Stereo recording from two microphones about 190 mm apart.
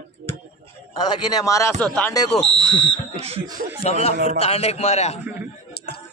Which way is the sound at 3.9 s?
35° left (ahead or behind).